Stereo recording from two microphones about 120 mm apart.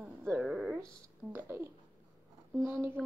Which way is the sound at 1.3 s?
15° right (ahead or behind).